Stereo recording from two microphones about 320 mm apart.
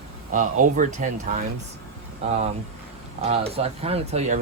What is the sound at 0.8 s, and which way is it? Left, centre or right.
Speech, right.